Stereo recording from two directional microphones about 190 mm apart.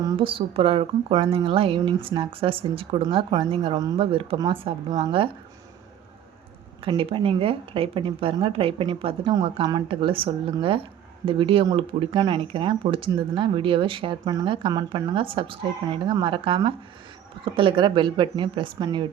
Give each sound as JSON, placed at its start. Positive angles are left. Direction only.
{"t": 0.0, "sound": "speech", "side_deg": -25}
{"t": 6.8, "sound": "speech", "side_deg": -30}